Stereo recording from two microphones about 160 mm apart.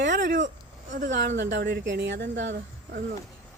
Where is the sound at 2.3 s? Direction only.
50° right (ahead or behind).